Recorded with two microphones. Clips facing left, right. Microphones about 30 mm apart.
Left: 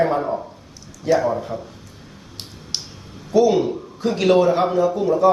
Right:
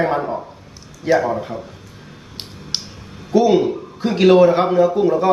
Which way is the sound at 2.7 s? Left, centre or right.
Right.